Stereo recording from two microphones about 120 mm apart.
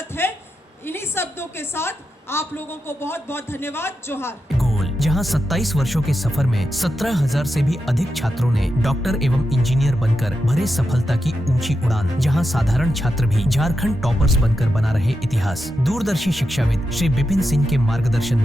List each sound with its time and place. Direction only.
0.2 s a sound: 20° left (ahead or behind)
3.0 s a man's voice: 20° left (ahead or behind)
4.6 s speech: centre (ahead or behind)